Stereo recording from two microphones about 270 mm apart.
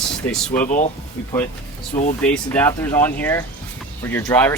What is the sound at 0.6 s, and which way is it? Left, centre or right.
Speech, left.